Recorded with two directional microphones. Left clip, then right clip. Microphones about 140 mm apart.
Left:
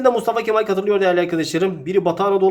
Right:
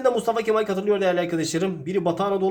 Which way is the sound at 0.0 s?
25° left (ahead or behind).